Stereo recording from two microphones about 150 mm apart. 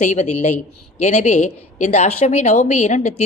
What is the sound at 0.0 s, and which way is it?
A woman's voice, 50° left (ahead or behind).